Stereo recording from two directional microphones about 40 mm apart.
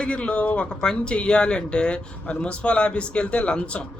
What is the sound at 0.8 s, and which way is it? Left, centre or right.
Speech, centre.